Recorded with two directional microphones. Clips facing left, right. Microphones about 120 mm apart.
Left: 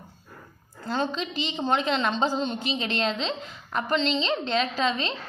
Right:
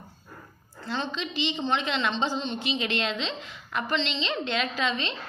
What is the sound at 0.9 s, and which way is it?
A woman's voice, 45° left (ahead or behind).